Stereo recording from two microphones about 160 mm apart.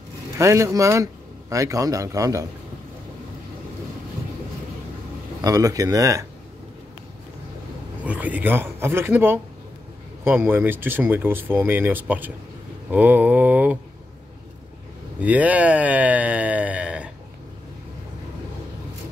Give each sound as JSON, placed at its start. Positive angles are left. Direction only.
{"t": 0.4, "sound": "a man's voice", "side_deg": -20}
{"t": 5.4, "sound": "a man's voice", "side_deg": -20}
{"t": 8.0, "sound": "speech", "side_deg": -10}
{"t": 15.2, "sound": "speech", "side_deg": -10}